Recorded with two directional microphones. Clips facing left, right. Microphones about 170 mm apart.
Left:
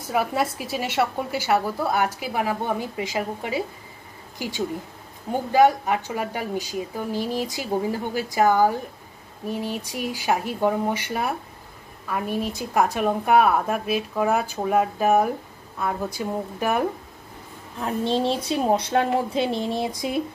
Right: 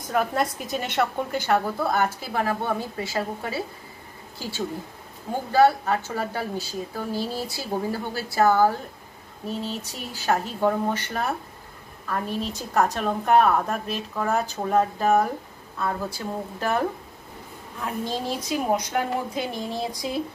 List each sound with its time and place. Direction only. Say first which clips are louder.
0.1 s a woman's voice: even; 5° left (ahead or behind)
17.7 s a woman's voice: left 5 dB; 25° left (ahead or behind)